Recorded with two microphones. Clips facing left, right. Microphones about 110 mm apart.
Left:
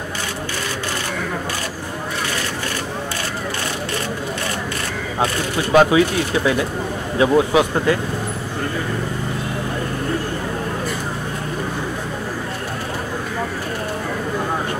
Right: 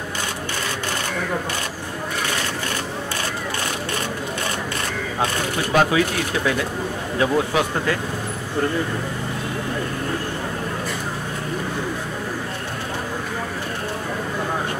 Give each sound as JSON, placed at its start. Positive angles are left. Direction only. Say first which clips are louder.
{"t": 5.7, "sound": "speech", "louder": "left 5 dB", "side_deg": 20}
{"t": 7.2, "sound": "speech", "louder": "left 5 dB", "side_deg": 20}